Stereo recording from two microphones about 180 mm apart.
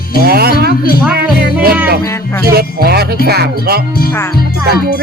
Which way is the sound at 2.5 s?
60° right (ahead or behind).